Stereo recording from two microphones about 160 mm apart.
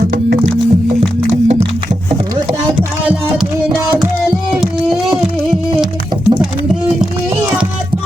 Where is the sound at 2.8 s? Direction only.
5° right (ahead or behind).